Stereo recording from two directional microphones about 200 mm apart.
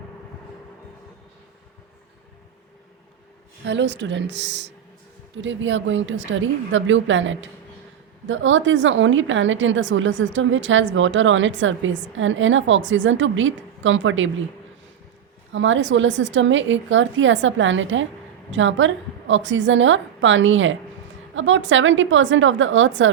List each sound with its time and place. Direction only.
3.6 s a woman's voice: 65° right (ahead or behind)
15.5 s a woman's voice: 70° right (ahead or behind)